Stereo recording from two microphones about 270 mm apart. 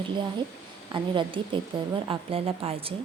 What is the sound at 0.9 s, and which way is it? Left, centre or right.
A woman's voice, centre.